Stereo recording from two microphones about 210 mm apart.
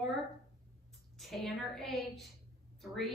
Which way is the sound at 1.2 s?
Centre (ahead or behind).